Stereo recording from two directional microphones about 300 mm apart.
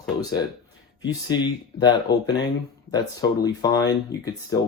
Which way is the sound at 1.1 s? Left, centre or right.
Centre.